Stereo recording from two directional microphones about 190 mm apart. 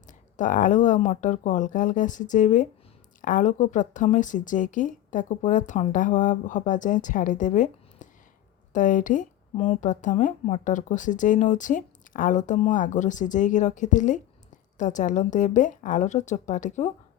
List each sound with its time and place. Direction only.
0.1 s speech: 40° left (ahead or behind)